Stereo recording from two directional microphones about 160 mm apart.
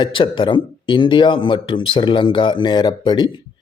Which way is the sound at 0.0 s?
30° left (ahead or behind).